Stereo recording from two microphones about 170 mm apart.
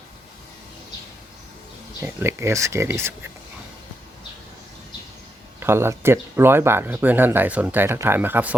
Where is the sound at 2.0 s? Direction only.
15° right (ahead or behind).